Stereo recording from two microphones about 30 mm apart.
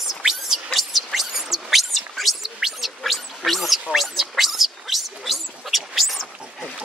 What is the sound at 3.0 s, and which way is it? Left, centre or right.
Gargling, centre.